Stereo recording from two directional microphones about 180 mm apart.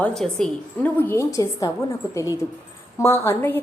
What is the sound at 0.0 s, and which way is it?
A woman's voice, 5° left (ahead or behind).